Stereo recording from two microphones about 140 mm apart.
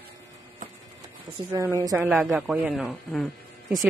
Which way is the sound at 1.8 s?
15° right (ahead or behind).